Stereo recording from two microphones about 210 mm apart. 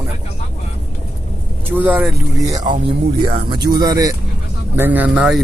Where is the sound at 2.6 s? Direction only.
20° right (ahead or behind).